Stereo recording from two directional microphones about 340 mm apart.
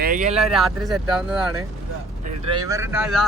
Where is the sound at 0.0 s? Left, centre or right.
Right.